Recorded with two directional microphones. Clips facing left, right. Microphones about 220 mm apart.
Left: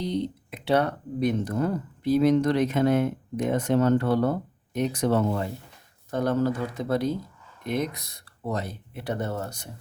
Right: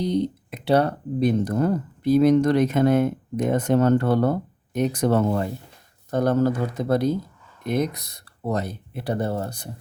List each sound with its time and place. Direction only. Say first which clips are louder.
0.0 s speech: right 5 dB; 40° right (ahead or behind)